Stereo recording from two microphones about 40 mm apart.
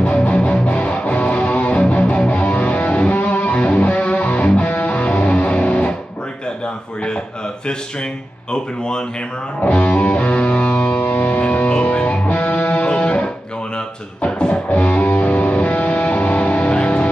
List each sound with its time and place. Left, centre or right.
0.0 s music: left
8.5 s speech: left
9.6 s music: left